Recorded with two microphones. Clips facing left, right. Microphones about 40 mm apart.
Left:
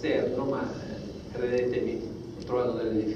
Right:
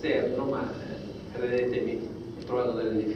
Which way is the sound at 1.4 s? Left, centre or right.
Centre.